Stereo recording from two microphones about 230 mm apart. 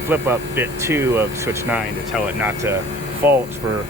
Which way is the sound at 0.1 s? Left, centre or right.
Centre.